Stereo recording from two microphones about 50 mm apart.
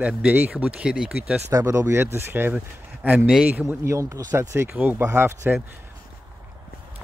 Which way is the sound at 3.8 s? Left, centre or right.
Right.